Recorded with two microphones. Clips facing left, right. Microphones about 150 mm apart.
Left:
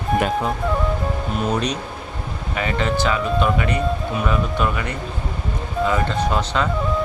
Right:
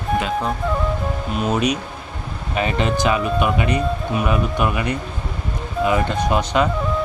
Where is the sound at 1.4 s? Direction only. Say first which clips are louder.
Right 3 dB; 5° right (ahead or behind).